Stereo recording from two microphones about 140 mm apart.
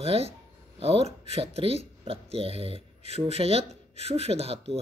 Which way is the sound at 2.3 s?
45° right (ahead or behind).